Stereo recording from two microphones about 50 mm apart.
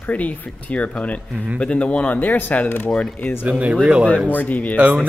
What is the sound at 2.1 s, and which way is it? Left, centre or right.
Speech, left.